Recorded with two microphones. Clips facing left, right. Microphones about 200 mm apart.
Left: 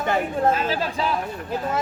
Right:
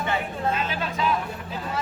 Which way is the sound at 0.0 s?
45° left (ahead or behind).